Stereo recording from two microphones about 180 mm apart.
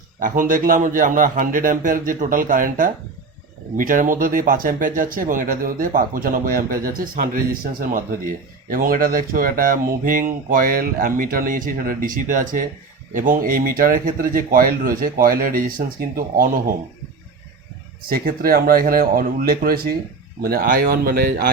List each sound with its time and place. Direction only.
0.2 s speech: 50° right (ahead or behind)
18.1 s speech: 55° right (ahead or behind)